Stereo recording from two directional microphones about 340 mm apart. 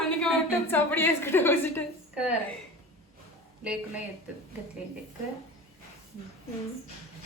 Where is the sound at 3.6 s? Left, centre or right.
Centre.